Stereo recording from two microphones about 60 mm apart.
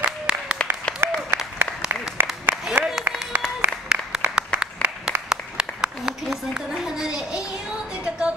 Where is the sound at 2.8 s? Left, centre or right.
Centre.